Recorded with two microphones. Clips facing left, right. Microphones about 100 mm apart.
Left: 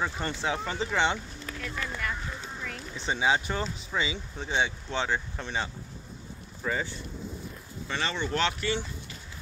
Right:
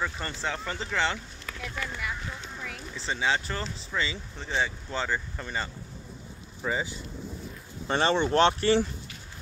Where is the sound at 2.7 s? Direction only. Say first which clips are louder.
Left 2 dB; centre (ahead or behind).